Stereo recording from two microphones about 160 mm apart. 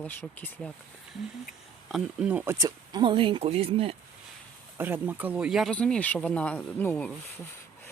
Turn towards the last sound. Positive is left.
turn(degrees=10)  # may be behind; listen again after turning